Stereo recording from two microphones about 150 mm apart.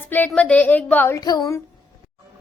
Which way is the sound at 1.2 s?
25° left (ahead or behind).